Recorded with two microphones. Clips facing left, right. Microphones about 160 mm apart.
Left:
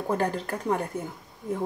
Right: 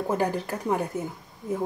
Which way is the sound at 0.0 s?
5° right (ahead or behind).